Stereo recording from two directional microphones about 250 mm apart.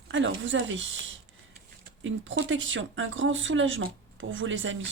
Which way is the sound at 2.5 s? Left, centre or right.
Right.